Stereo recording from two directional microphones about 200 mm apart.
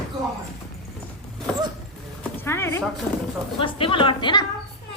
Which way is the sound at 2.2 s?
10° left (ahead or behind).